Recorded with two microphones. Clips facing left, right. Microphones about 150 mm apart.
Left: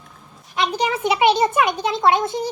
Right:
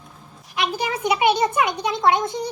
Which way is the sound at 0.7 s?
20° left (ahead or behind).